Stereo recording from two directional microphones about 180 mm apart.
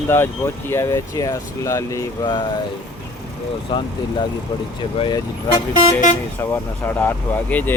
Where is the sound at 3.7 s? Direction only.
25° left (ahead or behind).